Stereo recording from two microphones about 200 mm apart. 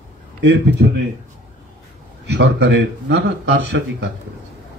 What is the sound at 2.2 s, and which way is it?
A man's voice, 60° right (ahead or behind).